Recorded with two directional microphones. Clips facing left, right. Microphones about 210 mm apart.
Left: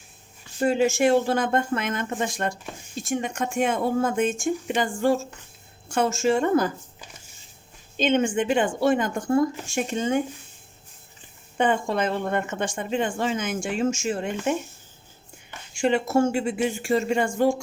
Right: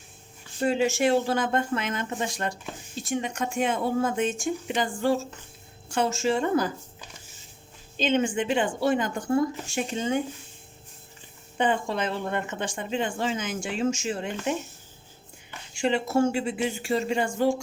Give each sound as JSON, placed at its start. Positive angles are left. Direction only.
{"t": 0.6, "sound": "speech", "side_deg": 45}
{"t": 7.9, "sound": "speech", "side_deg": 50}
{"t": 11.5, "sound": "speech", "side_deg": 50}
{"t": 15.7, "sound": "speech", "side_deg": 45}